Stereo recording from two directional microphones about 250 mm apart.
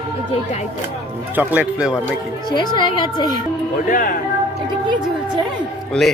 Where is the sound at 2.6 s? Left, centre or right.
Centre.